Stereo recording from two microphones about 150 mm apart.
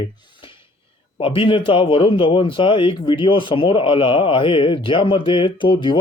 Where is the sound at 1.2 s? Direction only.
35° left (ahead or behind).